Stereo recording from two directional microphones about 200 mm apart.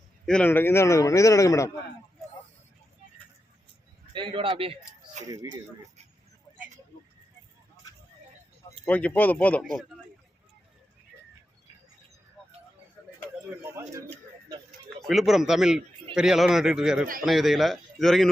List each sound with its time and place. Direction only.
0.3 s a man's voice: 5° left (ahead or behind)
4.1 s speech: 25° right (ahead or behind)
5.3 s speech: 15° right (ahead or behind)
8.8 s a man's voice: 5° left (ahead or behind)
13.6 s speech: 10° right (ahead or behind)
14.1 s a sound: 30° right (ahead or behind)
14.8 s a man's voice: centre (ahead or behind)